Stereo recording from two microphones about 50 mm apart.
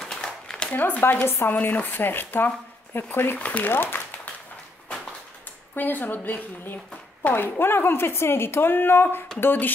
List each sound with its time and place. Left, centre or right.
0.0 s a sound: centre
0.7 s a woman's voice: left
3.3 s speech: left
3.6 s speech: left
5.8 s a woman's voice: left